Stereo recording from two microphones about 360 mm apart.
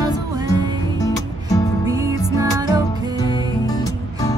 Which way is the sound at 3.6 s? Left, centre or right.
Centre.